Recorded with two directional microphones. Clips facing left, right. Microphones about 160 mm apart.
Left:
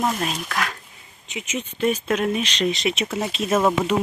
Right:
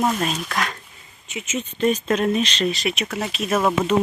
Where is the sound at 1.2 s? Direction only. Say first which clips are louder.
Right 1 dB; 15° left (ahead or behind).